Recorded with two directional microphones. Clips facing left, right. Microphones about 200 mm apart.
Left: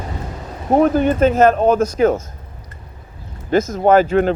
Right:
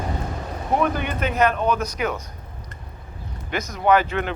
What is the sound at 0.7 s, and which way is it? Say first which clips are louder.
Speech: left 9 dB; 40° left (ahead or behind).